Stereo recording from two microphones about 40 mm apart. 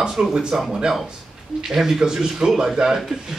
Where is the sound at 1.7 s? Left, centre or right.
Centre.